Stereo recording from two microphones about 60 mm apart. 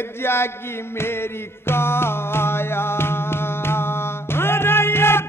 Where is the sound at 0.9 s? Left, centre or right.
Left.